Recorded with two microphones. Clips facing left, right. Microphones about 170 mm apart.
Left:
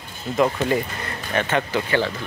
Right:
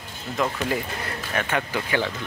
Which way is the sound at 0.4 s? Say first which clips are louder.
Left 6 dB; 5° left (ahead or behind).